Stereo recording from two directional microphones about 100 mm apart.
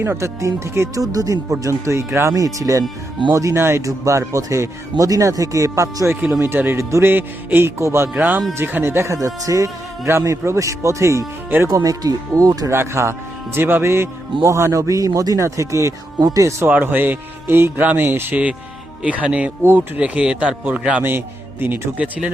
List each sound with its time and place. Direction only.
0.0 s speech: 25° right (ahead or behind)
8.1 s speech: 15° right (ahead or behind)
11.7 s speech: 40° right (ahead or behind)
12.7 s speech: 25° right (ahead or behind)
16.6 s speech: 20° right (ahead or behind)